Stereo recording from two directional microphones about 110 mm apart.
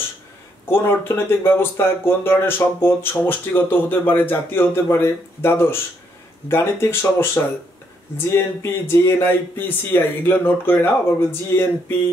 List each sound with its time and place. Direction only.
0.7 s speech: 20° left (ahead or behind)